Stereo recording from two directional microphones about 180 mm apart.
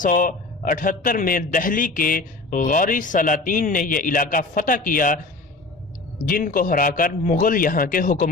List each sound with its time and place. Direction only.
0.0 s a man's voice: 50° left (ahead or behind)